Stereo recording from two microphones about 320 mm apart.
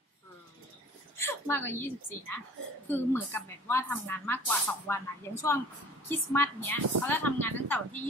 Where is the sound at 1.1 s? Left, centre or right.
Centre.